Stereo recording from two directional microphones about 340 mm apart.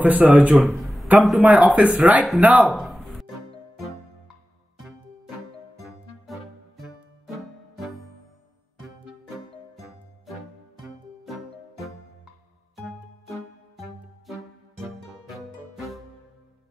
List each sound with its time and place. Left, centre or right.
0.0 s speech: centre
5.8 s music: centre
13.3 s music: centre